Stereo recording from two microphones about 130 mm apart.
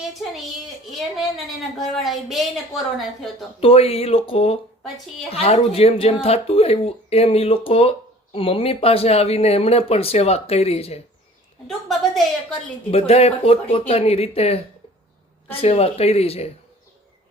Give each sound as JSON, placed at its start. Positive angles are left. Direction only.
{"t": 0.0, "sound": "a woman's voice", "side_deg": 0}
{"t": 3.6, "sound": "speech", "side_deg": 45}
{"t": 11.9, "sound": "a woman's voice", "side_deg": 0}
{"t": 12.9, "sound": "speech", "side_deg": 50}